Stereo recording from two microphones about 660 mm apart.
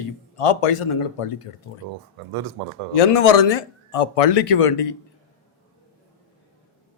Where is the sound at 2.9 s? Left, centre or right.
Left.